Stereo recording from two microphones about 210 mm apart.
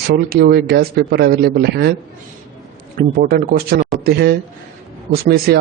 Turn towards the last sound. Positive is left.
turn(degrees=-50)  # may be behind; listen again after turning